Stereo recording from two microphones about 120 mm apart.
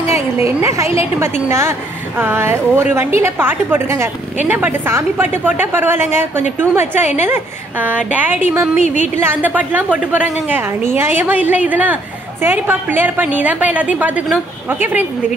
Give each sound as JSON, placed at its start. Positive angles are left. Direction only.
{"t": 0.1, "sound": "a woman's voice", "side_deg": -20}